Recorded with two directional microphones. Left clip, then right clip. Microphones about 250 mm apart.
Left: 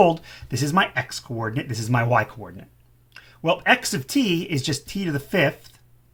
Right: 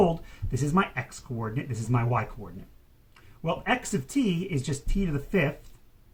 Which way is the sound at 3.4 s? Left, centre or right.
Left.